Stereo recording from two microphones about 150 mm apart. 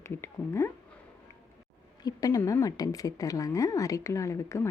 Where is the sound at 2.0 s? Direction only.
25° left (ahead or behind).